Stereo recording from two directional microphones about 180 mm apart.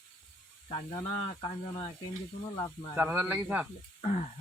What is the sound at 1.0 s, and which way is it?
Speech, 30° left (ahead or behind).